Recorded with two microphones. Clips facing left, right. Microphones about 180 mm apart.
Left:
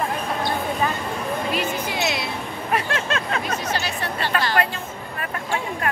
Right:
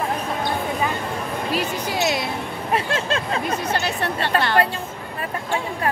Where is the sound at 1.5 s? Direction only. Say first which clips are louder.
Right 1 dB; 40° right (ahead or behind).